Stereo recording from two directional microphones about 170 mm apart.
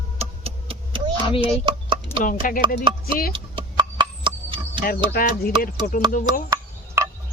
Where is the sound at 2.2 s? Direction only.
50° left (ahead or behind).